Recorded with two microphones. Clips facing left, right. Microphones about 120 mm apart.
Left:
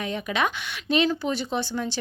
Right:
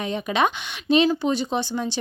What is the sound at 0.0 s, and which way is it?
A woman's voice, 25° right (ahead or behind).